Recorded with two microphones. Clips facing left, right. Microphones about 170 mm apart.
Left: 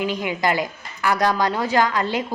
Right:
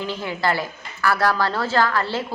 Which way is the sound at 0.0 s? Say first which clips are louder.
Left 2 dB; 15° left (ahead or behind).